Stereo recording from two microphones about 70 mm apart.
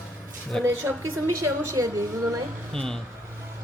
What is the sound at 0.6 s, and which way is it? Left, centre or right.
Speech, right.